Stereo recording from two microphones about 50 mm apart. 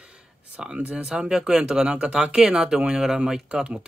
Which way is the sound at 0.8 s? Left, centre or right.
Right.